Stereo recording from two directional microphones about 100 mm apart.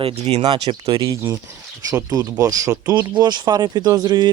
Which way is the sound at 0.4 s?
50° right (ahead or behind).